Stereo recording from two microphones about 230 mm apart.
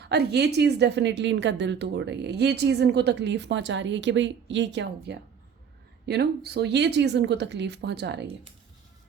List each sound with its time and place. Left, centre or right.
0.0 s a woman's voice: right